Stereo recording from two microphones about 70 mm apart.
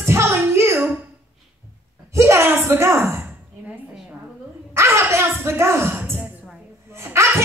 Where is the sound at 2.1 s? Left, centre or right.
Right.